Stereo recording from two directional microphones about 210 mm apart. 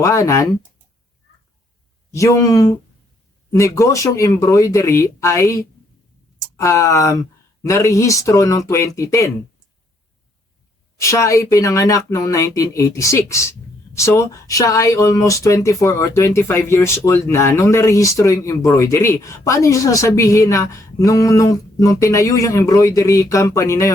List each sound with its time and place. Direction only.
0.0 s speech: 15° left (ahead or behind)
2.1 s speech: 15° left (ahead or behind)
11.0 s speech: 15° left (ahead or behind)